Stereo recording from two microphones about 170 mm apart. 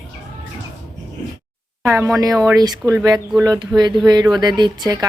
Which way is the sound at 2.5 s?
20° right (ahead or behind).